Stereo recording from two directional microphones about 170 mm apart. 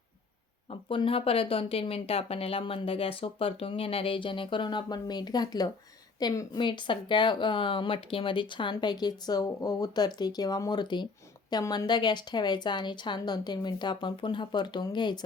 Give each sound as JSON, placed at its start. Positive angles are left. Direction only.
{"t": 0.7, "sound": "speech", "side_deg": 30}